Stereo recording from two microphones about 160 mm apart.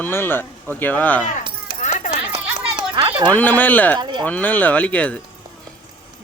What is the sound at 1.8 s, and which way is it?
Keys jangling, 50° left (ahead or behind).